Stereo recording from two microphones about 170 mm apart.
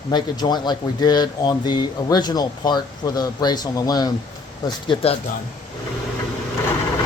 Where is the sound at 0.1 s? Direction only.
25° left (ahead or behind).